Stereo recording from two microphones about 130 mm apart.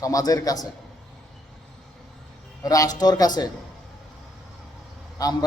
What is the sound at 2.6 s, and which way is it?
Speech, 25° left (ahead or behind).